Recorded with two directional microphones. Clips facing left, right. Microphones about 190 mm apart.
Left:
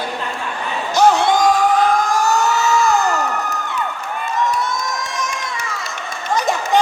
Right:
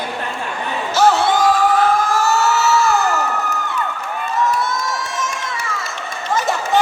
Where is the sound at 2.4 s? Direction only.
5° right (ahead or behind).